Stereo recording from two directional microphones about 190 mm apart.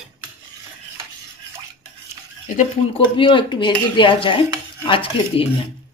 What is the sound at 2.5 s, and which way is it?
Speech, 30° left (ahead or behind).